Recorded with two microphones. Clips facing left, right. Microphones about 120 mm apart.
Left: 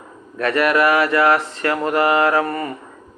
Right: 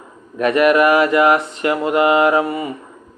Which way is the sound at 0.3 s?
20° right (ahead or behind).